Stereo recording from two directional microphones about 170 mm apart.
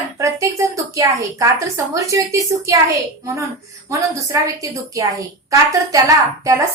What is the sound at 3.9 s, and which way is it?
A woman's voice, 20° right (ahead or behind).